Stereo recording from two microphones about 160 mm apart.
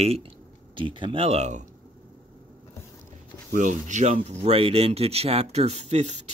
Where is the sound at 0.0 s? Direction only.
40° right (ahead or behind).